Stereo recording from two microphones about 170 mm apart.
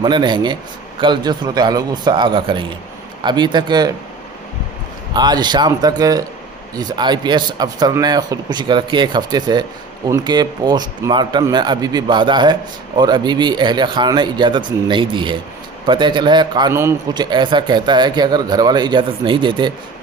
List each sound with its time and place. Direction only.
0.0 s speech: 25° right (ahead or behind)
5.1 s speech: 25° right (ahead or behind)